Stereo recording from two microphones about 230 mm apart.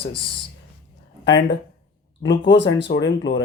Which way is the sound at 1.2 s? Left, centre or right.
Left.